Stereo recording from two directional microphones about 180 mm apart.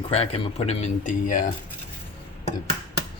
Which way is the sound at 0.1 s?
35° left (ahead or behind).